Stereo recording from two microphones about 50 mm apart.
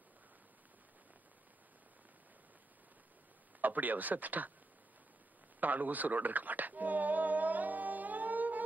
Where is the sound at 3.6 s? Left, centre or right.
Right.